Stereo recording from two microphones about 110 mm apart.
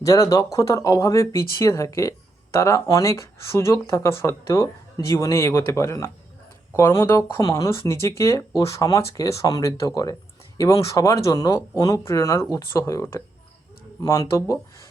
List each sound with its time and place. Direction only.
0.0 s speech: 30° left (ahead or behind)